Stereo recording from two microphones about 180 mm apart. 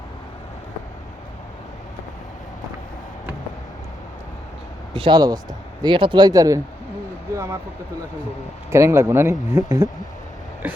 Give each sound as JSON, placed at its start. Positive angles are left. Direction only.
{"t": 4.9, "sound": "speech", "side_deg": -25}
{"t": 7.3, "sound": "a sound", "side_deg": -15}
{"t": 8.7, "sound": "speech", "side_deg": -15}